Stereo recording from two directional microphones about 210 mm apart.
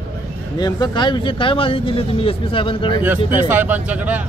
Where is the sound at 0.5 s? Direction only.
20° left (ahead or behind).